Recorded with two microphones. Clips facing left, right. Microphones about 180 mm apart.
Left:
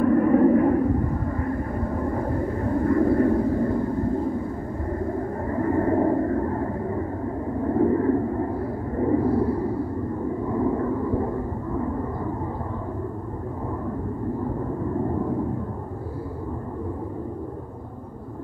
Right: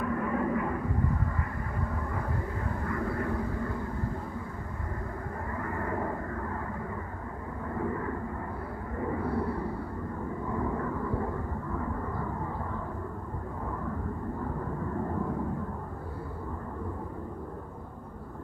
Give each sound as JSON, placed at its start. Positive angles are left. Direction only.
{"t": 0.0, "sound": "vehicle", "side_deg": 40}
{"t": 2.0, "sound": "vehicle", "side_deg": 40}
{"t": 5.5, "sound": "vehicle", "side_deg": 35}
{"t": 8.9, "sound": "a sound", "side_deg": 35}
{"t": 10.6, "sound": "vehicle", "side_deg": 25}